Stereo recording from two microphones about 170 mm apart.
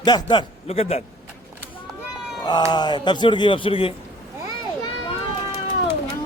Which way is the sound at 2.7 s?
25° left (ahead or behind).